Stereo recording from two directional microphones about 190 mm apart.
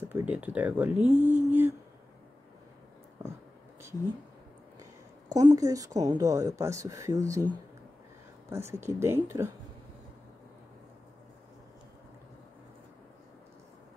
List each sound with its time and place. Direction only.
0.1 s speech: 10° right (ahead or behind)
5.3 s speech: 20° right (ahead or behind)
8.5 s speech: 15° right (ahead or behind)